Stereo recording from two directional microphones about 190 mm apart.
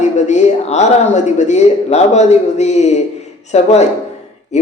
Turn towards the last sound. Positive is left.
turn(degrees=35)  # may be behind; listen again after turning